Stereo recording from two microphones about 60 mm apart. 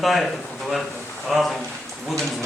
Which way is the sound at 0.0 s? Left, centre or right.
Centre.